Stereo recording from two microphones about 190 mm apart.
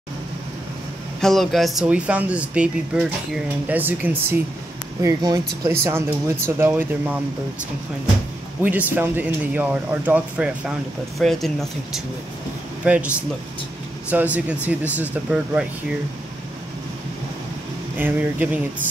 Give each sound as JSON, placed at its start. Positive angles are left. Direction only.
{"t": 1.2, "sound": "speech", "side_deg": 0}
{"t": 5.0, "sound": "speech", "side_deg": -20}
{"t": 8.6, "sound": "speech", "side_deg": -10}
{"t": 17.9, "sound": "speech", "side_deg": -10}